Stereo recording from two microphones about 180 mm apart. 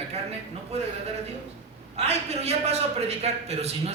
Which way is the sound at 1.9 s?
35° right (ahead or behind).